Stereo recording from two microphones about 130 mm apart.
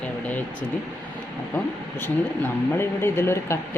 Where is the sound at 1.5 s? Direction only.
15° left (ahead or behind).